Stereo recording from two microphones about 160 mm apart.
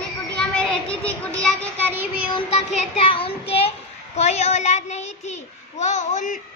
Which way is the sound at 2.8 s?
35° left (ahead or behind).